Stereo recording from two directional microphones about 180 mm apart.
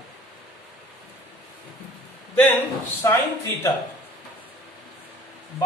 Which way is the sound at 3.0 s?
15° left (ahead or behind).